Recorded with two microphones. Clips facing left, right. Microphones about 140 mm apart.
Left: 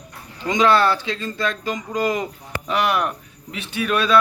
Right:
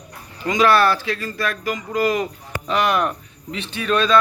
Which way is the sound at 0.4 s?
20° left (ahead or behind).